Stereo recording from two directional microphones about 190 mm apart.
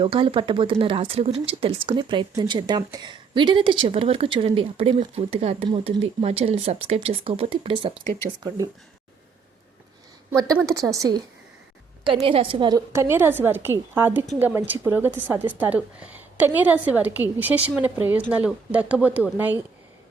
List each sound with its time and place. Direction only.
0.0 s speech: 25° right (ahead or behind)
10.3 s a woman's voice: 20° right (ahead or behind)
12.1 s a woman's voice: 30° right (ahead or behind); by 19.5 s 10° right (ahead or behind)